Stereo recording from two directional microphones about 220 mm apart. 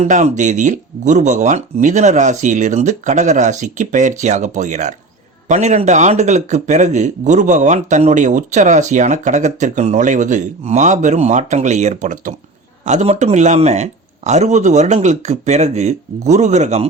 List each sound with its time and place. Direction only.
0.0 s speech: 30° right (ahead or behind)